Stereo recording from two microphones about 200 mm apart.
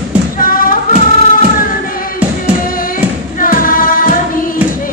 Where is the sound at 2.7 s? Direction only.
45° left (ahead or behind).